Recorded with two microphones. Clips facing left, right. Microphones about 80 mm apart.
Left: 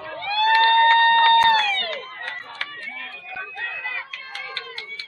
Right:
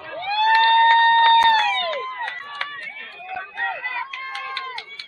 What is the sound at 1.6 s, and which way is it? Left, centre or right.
Emergency vehicle, centre.